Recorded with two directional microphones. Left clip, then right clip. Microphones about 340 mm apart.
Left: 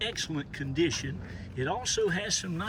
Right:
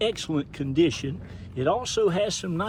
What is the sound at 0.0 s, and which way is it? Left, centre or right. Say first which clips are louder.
A man's voice: right 7 dB; centre.